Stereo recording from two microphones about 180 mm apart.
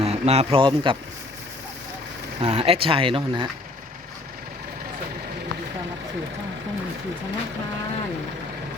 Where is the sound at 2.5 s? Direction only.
35° right (ahead or behind).